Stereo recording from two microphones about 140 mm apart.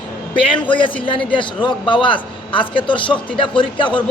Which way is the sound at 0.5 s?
35° left (ahead or behind).